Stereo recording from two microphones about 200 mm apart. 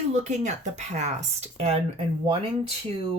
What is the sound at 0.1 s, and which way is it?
Speech, 35° right (ahead or behind).